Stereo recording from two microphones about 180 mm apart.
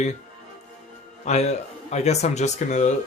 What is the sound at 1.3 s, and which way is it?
Speech, 40° left (ahead or behind).